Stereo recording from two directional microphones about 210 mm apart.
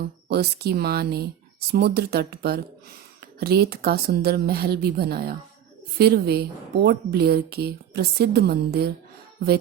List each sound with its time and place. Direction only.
0.3 s a woman's voice: 50° right (ahead or behind)